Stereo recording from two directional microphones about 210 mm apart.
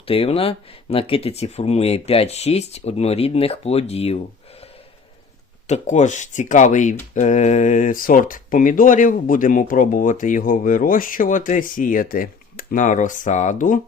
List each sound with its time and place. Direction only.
0.1 s speech: 25° left (ahead or behind)
5.6 s speech: 35° left (ahead or behind)